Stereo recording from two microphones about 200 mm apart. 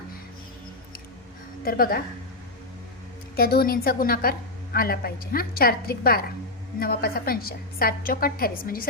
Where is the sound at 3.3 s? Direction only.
50° left (ahead or behind).